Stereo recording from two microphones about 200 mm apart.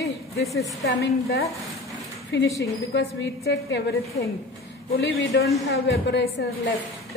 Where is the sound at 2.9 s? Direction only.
60° left (ahead or behind).